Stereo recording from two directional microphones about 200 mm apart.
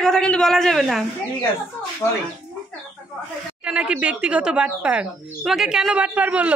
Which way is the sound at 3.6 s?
5° right (ahead or behind).